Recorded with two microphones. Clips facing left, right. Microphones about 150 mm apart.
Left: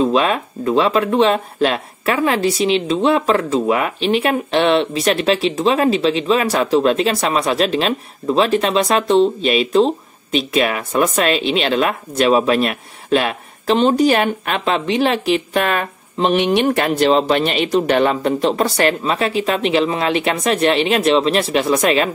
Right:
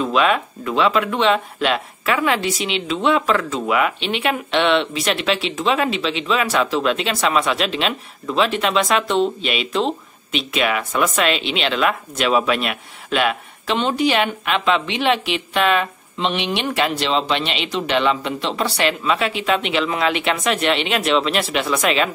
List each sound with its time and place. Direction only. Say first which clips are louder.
0.0 s speech: left 2 dB; 35° left (ahead or behind)